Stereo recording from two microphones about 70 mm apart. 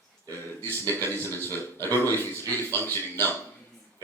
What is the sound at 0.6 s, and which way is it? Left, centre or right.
Speech, left.